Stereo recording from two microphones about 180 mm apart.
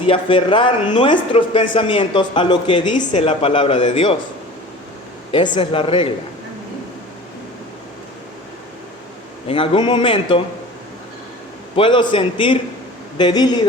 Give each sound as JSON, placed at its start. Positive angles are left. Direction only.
{"t": 0.0, "sound": "speech", "side_deg": 30}
{"t": 5.3, "sound": "speech", "side_deg": 25}
{"t": 9.5, "sound": "speech", "side_deg": 30}
{"t": 11.8, "sound": "speech", "side_deg": 25}